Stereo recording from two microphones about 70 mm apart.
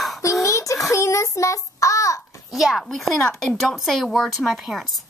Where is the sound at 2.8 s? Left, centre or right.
Centre.